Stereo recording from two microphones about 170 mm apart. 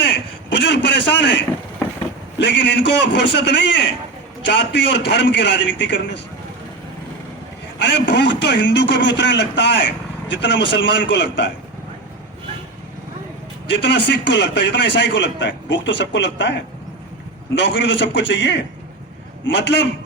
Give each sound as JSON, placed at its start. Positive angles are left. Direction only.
{"t": 0.5, "sound": "a man's voice", "side_deg": 90}
{"t": 7.8, "sound": "a man's voice", "side_deg": 90}
{"t": 13.7, "sound": "a man's voice", "side_deg": 90}